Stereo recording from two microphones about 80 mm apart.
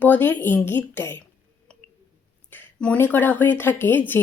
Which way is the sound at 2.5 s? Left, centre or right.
Centre.